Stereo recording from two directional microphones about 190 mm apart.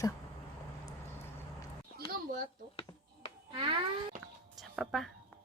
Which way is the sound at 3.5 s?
25° right (ahead or behind).